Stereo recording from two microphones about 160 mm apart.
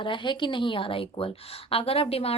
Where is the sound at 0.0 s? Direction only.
30° left (ahead or behind).